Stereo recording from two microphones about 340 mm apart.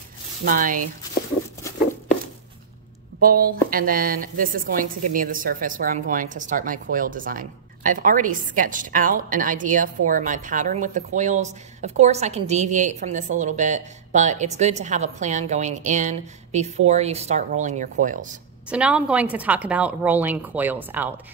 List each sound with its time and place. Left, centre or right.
0.5 s a woman's voice: right
3.2 s a woman's voice: right
18.7 s speech: centre